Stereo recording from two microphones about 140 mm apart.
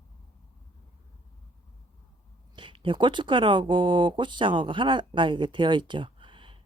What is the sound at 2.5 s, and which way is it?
Speech, 35° right (ahead or behind).